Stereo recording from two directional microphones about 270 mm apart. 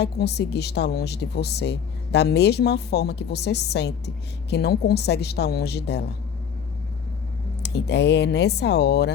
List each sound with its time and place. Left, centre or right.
0.0 s speech: left
7.6 s speech: left